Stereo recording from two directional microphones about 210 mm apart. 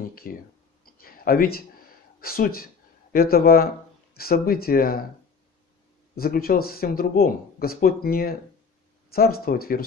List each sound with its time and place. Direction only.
0.0 s speech: 45° left (ahead or behind)
1.0 s a sound: 45° left (ahead or behind)
2.1 s speech: 45° left (ahead or behind)
6.1 s speech: 45° left (ahead or behind)